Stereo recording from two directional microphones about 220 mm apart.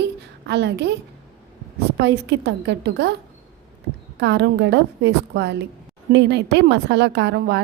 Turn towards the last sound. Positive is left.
turn(degrees=-50)  # may be behind; listen again after turning